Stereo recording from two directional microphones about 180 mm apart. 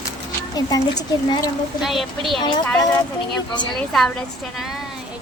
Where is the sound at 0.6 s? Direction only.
20° left (ahead or behind).